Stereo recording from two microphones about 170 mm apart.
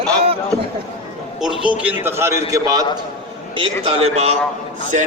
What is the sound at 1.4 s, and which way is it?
A man's voice, 5° right (ahead or behind).